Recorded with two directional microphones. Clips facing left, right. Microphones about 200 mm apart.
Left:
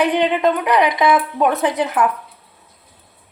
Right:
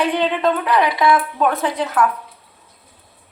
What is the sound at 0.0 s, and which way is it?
A woman's voice, 15° left (ahead or behind).